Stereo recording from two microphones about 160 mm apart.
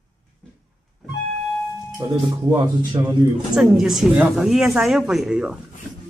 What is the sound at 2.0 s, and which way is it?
Speech, 25° right (ahead or behind).